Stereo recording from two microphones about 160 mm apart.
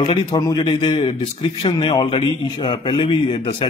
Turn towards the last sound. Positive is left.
turn(degrees=35)  # may be behind; listen again after turning